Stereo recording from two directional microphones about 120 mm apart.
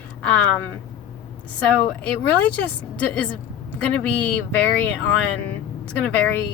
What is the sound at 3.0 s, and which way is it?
Speech, 10° left (ahead or behind).